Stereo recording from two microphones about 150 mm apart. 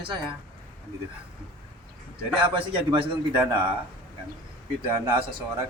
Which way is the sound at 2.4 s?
35° right (ahead or behind).